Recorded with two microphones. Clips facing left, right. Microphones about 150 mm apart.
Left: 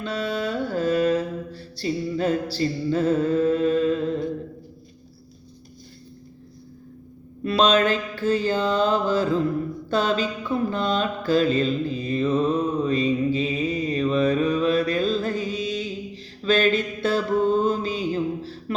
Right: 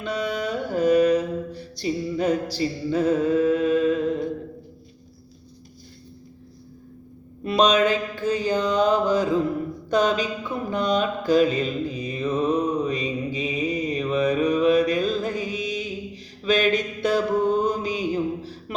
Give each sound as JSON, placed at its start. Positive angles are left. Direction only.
{"t": 0.0, "sound": "mantra", "side_deg": -15}
{"t": 7.4, "sound": "mantra", "side_deg": -15}